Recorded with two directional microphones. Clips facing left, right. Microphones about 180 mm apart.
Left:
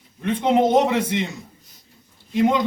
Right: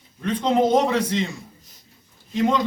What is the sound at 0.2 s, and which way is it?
A man's voice, 20° left (ahead or behind).